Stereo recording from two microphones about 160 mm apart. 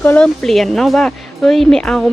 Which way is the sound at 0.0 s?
10° left (ahead or behind).